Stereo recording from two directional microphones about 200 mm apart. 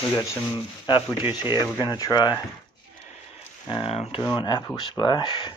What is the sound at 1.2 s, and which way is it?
Speech, 15° right (ahead or behind).